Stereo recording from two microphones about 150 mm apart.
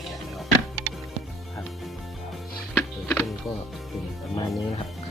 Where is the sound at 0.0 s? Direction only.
Centre (ahead or behind).